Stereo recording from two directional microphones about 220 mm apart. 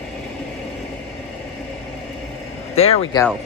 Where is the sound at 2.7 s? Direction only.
30° left (ahead or behind).